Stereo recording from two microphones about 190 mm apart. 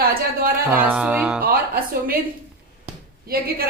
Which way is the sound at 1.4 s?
50° right (ahead or behind).